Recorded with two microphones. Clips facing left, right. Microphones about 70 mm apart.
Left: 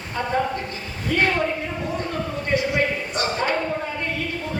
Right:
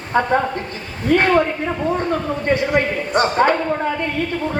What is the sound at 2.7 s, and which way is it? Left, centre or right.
Speech, right.